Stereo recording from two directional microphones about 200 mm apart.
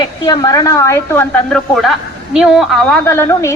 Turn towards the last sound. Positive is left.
turn(degrees=15)  # may be behind; listen again after turning